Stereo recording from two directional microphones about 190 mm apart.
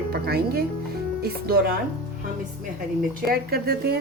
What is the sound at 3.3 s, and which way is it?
Speech, 55° right (ahead or behind).